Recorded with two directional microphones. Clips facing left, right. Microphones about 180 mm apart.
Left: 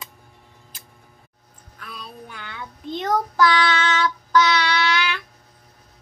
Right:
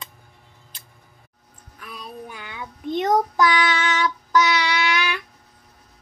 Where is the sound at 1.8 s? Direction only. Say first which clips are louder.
Right 2 dB; 15° right (ahead or behind).